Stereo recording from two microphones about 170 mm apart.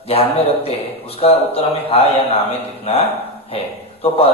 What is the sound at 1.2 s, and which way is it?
A man's voice, 35° left (ahead or behind).